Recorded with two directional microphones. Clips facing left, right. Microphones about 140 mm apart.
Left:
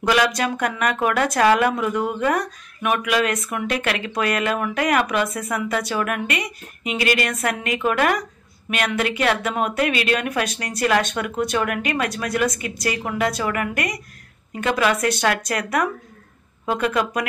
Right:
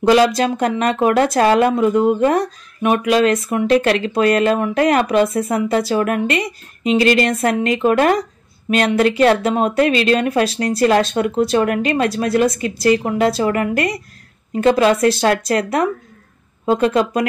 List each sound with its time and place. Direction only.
0.0 s speech: 30° right (ahead or behind)